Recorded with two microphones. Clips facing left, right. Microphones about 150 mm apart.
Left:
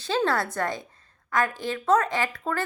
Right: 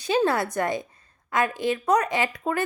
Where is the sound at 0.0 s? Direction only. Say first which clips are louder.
Right 2 dB; 15° right (ahead or behind).